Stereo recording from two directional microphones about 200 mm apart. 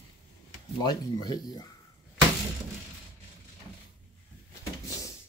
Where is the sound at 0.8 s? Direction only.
20° left (ahead or behind).